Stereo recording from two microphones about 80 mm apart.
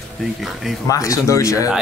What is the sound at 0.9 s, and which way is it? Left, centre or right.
Speech, left.